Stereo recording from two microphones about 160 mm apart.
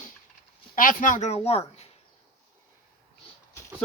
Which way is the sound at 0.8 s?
55° left (ahead or behind).